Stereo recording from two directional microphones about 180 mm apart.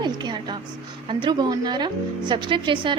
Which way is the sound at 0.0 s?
25° right (ahead or behind).